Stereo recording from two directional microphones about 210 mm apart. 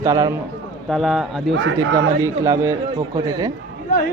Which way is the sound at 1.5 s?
60° right (ahead or behind).